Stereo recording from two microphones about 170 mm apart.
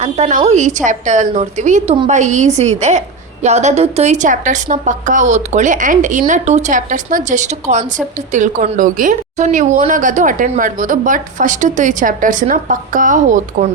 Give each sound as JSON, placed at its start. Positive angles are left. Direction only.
{"t": 0.0, "sound": "a woman's voice", "side_deg": -45}